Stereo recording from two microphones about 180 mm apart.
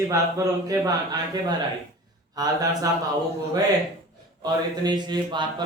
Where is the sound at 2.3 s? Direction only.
20° right (ahead or behind).